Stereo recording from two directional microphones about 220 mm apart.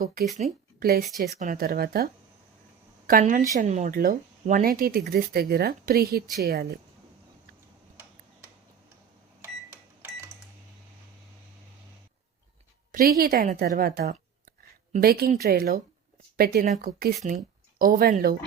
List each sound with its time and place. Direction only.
0.0 s a woman's voice: 40° right (ahead or behind)
3.1 s a woman's voice: 40° right (ahead or behind)
12.9 s a woman's voice: 40° right (ahead or behind)